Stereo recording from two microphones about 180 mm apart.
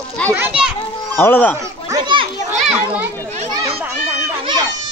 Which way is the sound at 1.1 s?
10° left (ahead or behind).